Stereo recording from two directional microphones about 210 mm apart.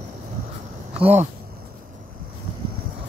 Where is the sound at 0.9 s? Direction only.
30° right (ahead or behind).